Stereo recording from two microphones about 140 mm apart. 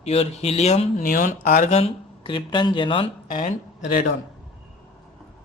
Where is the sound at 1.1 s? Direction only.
75° left (ahead or behind); by 1.9 s 55° left (ahead or behind).